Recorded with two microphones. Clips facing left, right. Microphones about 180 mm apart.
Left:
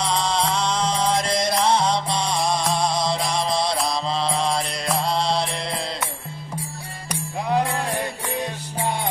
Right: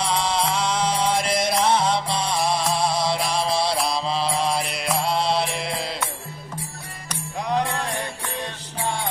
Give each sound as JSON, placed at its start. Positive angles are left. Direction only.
{"t": 0.0, "sound": "music", "side_deg": -5}
{"t": 3.7, "sound": "mantra", "side_deg": -5}
{"t": 7.1, "sound": "music", "side_deg": 5}
{"t": 7.7, "sound": "music", "side_deg": 15}